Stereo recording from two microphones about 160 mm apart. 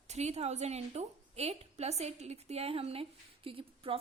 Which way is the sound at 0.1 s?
45° right (ahead or behind).